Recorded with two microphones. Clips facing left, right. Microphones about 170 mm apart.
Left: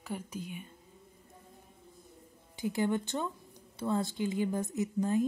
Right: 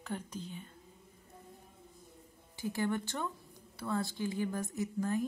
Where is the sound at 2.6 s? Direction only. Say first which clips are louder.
Left 3 dB; 20° left (ahead or behind).